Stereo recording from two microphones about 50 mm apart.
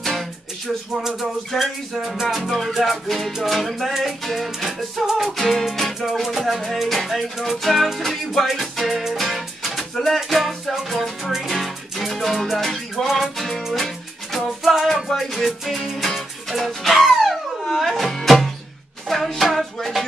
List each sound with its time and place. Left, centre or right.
1.6 s music: centre